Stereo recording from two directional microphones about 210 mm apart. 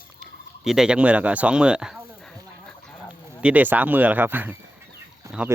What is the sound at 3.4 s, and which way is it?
Speech, 5° right (ahead or behind).